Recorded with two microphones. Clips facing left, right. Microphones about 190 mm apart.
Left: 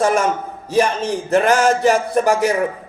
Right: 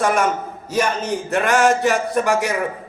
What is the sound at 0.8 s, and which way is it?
Speech, 35° left (ahead or behind).